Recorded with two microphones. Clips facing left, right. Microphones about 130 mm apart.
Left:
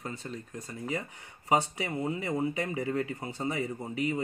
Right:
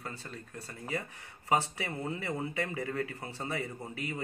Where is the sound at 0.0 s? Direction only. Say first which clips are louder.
Left 4 dB; 20° left (ahead or behind).